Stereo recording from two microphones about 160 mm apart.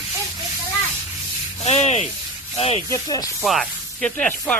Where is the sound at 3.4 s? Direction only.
Centre (ahead or behind).